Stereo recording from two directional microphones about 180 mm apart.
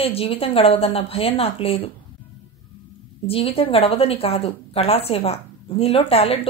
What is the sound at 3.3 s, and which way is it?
Speech, 30° left (ahead or behind).